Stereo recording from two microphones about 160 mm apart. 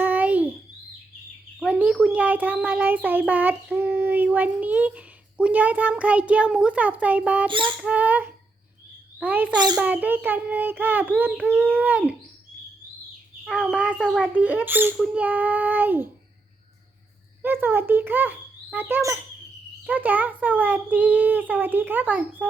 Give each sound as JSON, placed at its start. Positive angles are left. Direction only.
{"t": 0.0, "sound": "babbling", "side_deg": -10}
{"t": 1.5, "sound": "a child's voice", "side_deg": -10}
{"t": 7.4, "sound": "rodents", "side_deg": -30}
{"t": 7.8, "sound": "speech", "side_deg": -10}
{"t": 9.5, "sound": "speech", "side_deg": -25}
{"t": 9.7, "sound": "speech", "side_deg": -10}
{"t": 13.4, "sound": "speech", "side_deg": 0}
{"t": 17.4, "sound": "a child's voice", "side_deg": -15}